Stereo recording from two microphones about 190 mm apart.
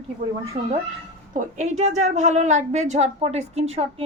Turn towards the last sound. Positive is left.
turn(degrees=-30)  # may be behind; listen again after turning